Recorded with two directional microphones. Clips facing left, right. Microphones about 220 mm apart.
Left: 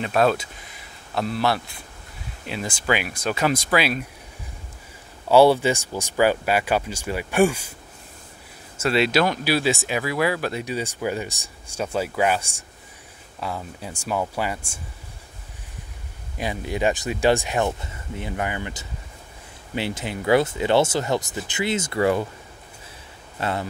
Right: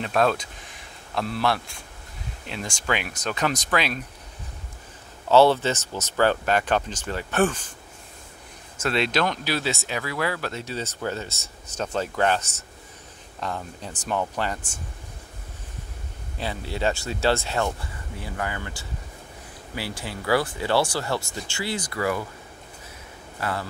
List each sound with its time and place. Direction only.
0.0 s speech: 5° left (ahead or behind)
5.3 s speech: 10° left (ahead or behind)
8.7 s speech: 5° left (ahead or behind)
16.3 s speech: 15° left (ahead or behind)
23.4 s speech: 20° left (ahead or behind)